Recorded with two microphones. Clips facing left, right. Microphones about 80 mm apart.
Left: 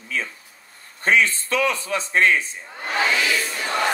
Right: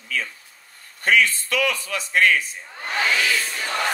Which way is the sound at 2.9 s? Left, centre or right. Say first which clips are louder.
Left 1 dB; centre.